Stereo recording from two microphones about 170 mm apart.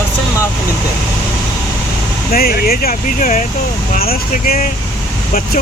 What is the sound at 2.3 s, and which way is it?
Speech, 60° left (ahead or behind).